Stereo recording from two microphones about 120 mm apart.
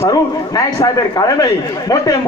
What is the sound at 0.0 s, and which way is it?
A man's voice, 30° left (ahead or behind).